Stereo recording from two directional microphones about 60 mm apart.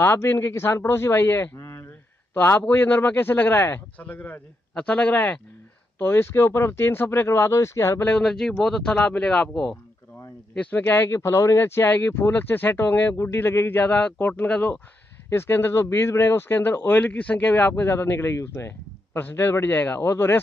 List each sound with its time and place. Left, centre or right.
0.0 s speech: left
1.6 s a sound: left
2.3 s a man's voice: left
4.0 s speech: left
5.9 s speech: left
8.2 s speech: centre
9.5 s speech: centre
10.6 s speech: left
11.1 s speech: left
14.3 s speech: left
15.2 s speech: left